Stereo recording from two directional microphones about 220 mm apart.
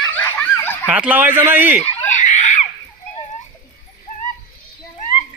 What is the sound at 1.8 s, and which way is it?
Giggle, 30° left (ahead or behind).